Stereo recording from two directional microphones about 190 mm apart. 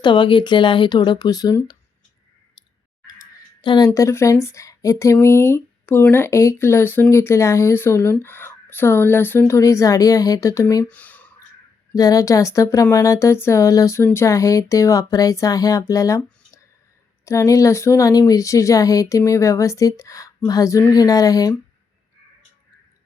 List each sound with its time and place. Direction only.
0.0 s speech: 25° left (ahead or behind)
3.2 s speech: 20° left (ahead or behind)
10.8 s a sound: 10° left (ahead or behind)
11.9 s speech: 20° left (ahead or behind)